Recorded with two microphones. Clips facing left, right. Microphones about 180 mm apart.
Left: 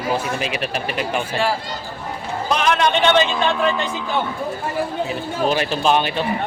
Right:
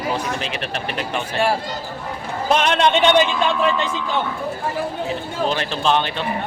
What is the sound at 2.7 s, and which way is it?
Speech, 20° right (ahead or behind).